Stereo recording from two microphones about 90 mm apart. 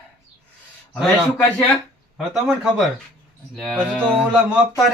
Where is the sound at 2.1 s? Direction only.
10° right (ahead or behind).